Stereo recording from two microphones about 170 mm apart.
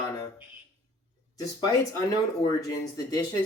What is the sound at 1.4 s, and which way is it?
Speech, 20° left (ahead or behind).